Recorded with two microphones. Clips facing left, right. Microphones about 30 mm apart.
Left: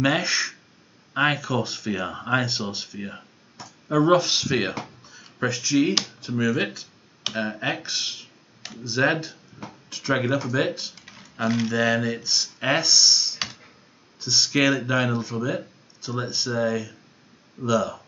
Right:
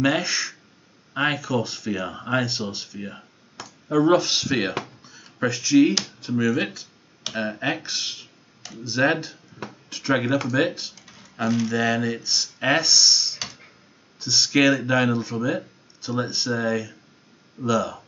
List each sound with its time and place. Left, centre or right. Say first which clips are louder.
0.0 s speech: even; centre
3.6 s a sound: right 3 dB; right
3.9 s speech: even; centre
4.8 s a sound: even; centre
6.2 s speech: right 3 dB; centre
11.4 s speech: right 1 dB; left
11.7 s speech: even; centre